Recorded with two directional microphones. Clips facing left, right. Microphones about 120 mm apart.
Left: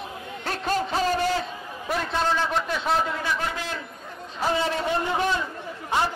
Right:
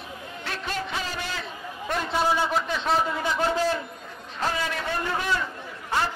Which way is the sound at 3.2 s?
25° right (ahead or behind).